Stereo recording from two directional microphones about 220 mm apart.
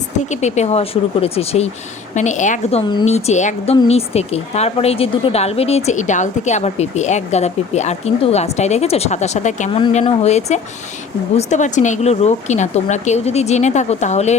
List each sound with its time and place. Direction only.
0.2 s a woman's voice: 30° left (ahead or behind)